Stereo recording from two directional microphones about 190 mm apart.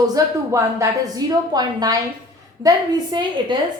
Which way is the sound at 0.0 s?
20° right (ahead or behind).